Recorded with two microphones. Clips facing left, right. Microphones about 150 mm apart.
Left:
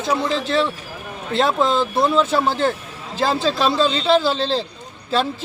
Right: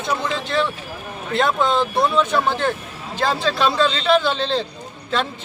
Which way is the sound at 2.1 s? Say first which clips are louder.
Left 1 dB; 30° left (ahead or behind).